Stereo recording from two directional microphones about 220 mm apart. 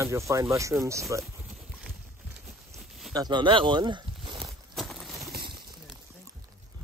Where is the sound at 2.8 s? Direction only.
Centre (ahead or behind).